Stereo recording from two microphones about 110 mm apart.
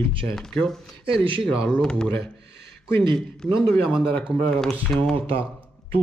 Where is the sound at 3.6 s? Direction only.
5° right (ahead or behind).